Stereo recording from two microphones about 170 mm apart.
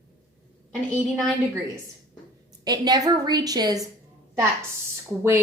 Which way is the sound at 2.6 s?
25° right (ahead or behind).